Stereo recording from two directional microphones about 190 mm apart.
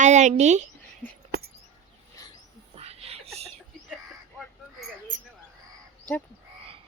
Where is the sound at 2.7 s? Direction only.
30° right (ahead or behind).